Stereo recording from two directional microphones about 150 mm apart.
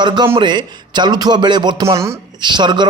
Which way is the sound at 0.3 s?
30° right (ahead or behind).